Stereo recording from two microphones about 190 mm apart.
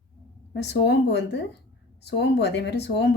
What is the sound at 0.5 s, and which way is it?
Speech, 65° left (ahead or behind).